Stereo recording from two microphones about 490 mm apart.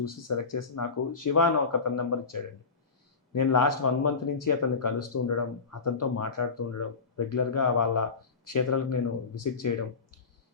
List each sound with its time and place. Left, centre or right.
0.0 s speech: left